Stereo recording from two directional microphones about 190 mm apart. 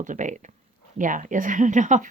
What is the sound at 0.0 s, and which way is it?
Speech, 40° right (ahead or behind).